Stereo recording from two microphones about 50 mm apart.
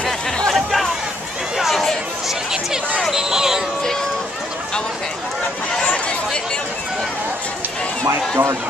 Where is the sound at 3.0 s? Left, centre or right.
Centre.